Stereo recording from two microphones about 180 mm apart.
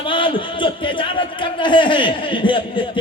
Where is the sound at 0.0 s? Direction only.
30° left (ahead or behind).